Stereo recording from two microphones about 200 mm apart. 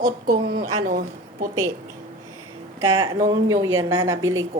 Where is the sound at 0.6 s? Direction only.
90° right.